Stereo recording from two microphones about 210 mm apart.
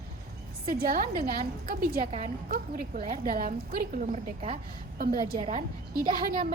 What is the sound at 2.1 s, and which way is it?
A woman's voice, 30° right (ahead or behind).